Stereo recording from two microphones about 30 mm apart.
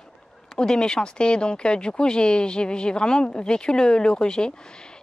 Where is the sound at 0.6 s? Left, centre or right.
Left.